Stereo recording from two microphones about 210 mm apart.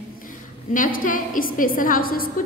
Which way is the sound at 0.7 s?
40° left (ahead or behind).